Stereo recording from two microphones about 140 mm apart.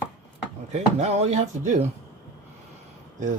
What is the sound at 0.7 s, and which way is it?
Speech, 50° right (ahead or behind).